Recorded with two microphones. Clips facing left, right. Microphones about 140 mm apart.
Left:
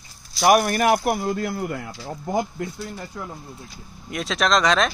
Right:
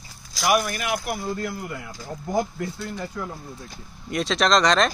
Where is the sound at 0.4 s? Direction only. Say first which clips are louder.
Left 5 dB; 45° left (ahead or behind).